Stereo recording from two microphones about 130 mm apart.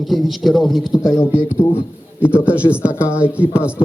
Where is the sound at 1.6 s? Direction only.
30° left (ahead or behind).